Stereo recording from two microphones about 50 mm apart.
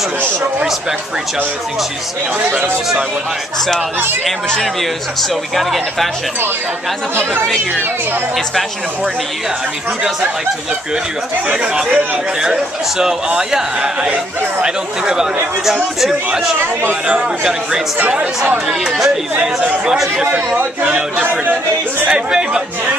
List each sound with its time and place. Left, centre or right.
5.6 s speech: centre
11.6 s speech: centre
19.3 s speech: centre
21.2 s speech: right
22.0 s speech: centre